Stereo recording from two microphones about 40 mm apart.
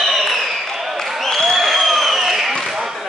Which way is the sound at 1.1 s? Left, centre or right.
Centre.